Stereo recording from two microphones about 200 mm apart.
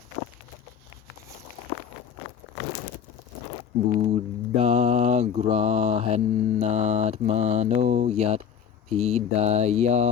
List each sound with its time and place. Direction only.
3.9 s mantra: 30° right (ahead or behind)
8.9 s speech: 30° right (ahead or behind)